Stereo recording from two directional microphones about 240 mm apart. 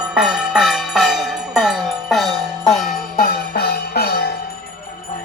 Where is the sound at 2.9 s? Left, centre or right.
Left.